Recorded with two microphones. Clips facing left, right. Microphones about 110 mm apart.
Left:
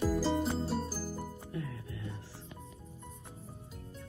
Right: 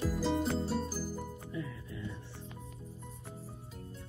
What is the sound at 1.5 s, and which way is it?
Music, 60° left (ahead or behind).